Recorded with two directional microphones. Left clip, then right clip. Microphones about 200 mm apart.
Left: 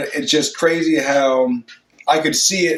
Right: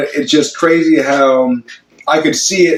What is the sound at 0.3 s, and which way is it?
Speech, 50° left (ahead or behind).